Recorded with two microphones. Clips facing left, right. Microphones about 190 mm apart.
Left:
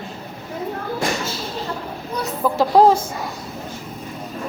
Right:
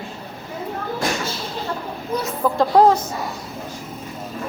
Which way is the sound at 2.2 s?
5° left (ahead or behind).